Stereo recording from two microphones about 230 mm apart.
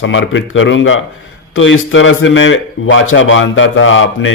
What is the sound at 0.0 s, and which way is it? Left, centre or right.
A man's voice, left.